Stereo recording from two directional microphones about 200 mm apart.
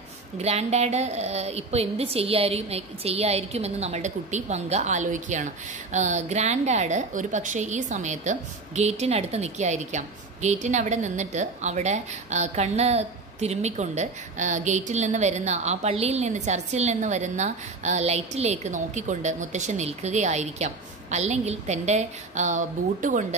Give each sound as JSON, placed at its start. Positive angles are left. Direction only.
{"t": 0.4, "sound": "a woman's voice", "side_deg": -30}